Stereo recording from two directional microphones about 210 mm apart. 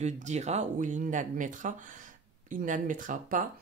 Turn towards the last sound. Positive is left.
turn(degrees=-40)  # may be behind; listen again after turning